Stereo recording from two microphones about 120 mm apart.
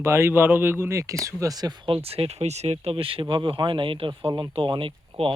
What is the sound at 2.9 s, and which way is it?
Speech, 45° right (ahead or behind).